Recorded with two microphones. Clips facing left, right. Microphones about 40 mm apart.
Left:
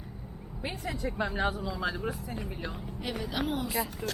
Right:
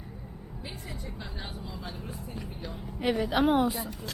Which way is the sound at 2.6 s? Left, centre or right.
Left.